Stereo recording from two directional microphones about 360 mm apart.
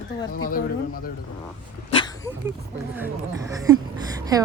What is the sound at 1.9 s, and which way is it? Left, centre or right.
Dog, centre.